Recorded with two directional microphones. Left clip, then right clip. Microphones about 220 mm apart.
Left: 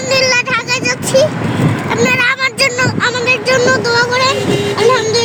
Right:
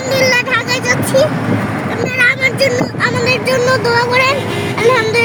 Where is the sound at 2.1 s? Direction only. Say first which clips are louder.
Right 2 dB; 35° left (ahead or behind).